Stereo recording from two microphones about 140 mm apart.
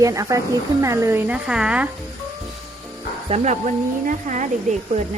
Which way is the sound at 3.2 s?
50° right (ahead or behind).